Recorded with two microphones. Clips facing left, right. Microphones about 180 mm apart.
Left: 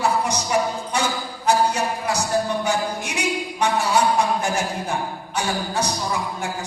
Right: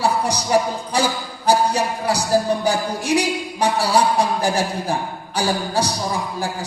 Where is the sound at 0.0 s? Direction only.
35° right (ahead or behind).